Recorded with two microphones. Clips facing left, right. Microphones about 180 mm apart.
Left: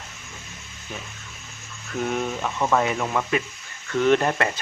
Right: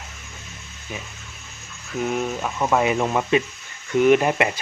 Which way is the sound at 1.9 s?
5° right (ahead or behind).